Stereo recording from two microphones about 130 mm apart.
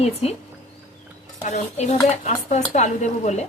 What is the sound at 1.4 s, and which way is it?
A woman's voice, 65° left (ahead or behind).